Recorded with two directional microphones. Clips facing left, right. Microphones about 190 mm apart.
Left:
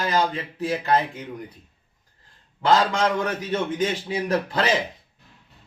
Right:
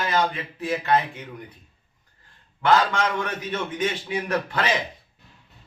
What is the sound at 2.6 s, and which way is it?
A man's voice, 35° left (ahead or behind).